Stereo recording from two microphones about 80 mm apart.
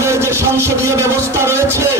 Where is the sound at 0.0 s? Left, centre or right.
Right.